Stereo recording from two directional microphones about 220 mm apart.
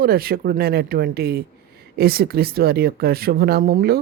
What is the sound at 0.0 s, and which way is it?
Speech, 45° right (ahead or behind).